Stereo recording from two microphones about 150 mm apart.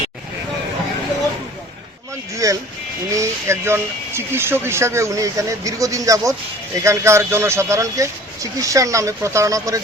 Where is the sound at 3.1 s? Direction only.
20° right (ahead or behind).